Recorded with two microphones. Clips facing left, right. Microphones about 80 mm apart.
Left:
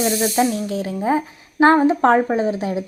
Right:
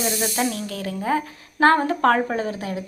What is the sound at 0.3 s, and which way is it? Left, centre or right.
A woman's voice, left.